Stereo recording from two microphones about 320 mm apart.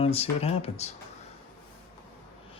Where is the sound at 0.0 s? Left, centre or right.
Centre.